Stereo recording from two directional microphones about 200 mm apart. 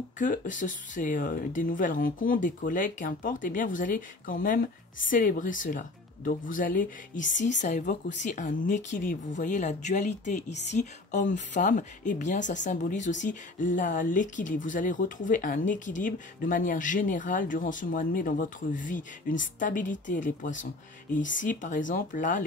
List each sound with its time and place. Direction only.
0.2 s speech: 40° left (ahead or behind)